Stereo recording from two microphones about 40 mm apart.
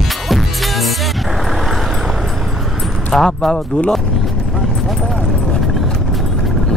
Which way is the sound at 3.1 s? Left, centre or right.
Centre.